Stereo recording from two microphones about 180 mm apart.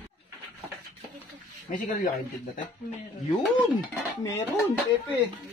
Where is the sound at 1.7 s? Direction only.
40° left (ahead or behind).